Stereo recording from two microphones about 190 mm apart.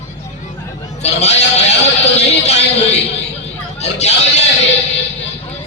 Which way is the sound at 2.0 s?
35° left (ahead or behind).